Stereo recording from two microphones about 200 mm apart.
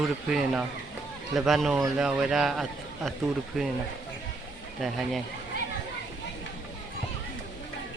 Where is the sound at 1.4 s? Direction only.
Centre (ahead or behind).